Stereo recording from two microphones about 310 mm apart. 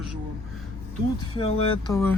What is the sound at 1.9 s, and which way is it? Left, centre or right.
Speech, centre.